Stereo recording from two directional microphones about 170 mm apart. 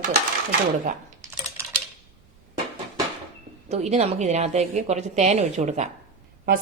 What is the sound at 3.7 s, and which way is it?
A woman's voice, 40° right (ahead or behind).